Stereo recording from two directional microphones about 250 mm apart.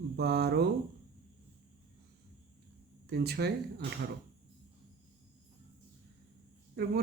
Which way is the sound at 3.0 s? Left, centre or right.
Right.